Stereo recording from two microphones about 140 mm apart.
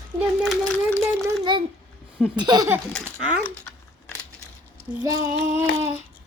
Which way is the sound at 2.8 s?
10° left (ahead or behind).